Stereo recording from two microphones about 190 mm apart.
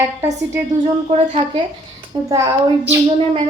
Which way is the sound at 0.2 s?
15° right (ahead or behind).